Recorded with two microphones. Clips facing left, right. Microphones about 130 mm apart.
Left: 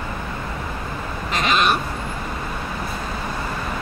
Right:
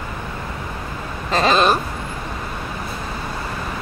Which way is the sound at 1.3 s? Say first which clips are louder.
Right 4 dB; 35° right (ahead or behind).